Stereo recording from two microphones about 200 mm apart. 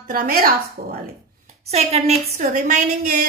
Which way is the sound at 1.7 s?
30° right (ahead or behind).